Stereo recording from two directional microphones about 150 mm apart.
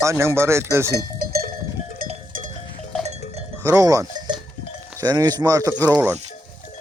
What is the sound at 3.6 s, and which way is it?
Speech, 20° right (ahead or behind).